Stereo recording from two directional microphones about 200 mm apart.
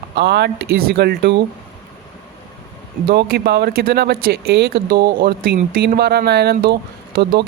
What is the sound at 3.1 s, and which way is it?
Speech, 55° right (ahead or behind).